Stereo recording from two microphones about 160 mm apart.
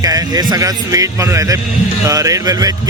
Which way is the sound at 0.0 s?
20° right (ahead or behind).